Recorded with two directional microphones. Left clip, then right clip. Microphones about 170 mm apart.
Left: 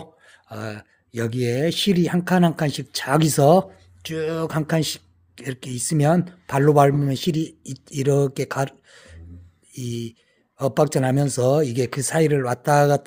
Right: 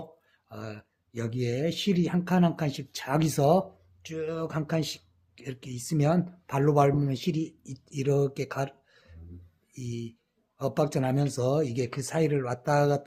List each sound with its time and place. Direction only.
0.0 s speech: 35° left (ahead or behind)